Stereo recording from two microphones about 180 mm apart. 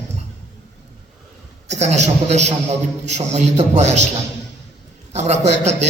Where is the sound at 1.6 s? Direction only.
40° right (ahead or behind).